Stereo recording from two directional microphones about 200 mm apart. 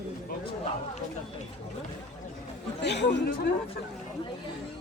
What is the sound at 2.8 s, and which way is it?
Speech, 60° left (ahead or behind).